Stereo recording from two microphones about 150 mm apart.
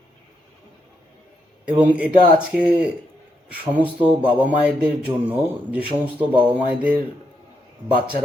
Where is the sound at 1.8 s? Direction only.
10° right (ahead or behind).